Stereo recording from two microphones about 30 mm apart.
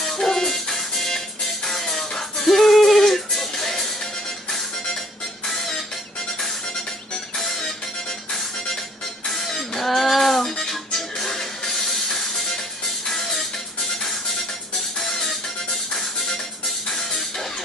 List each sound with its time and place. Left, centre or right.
0.0 s music: centre
7.3 s music: centre
9.8 s music: centre
15.0 s music: centre
16.8 s music: centre